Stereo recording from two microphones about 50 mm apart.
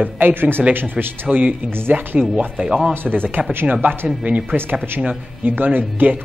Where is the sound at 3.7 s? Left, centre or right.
Right.